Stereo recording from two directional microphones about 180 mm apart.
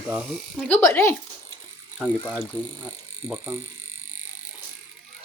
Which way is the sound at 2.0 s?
5° right (ahead or behind).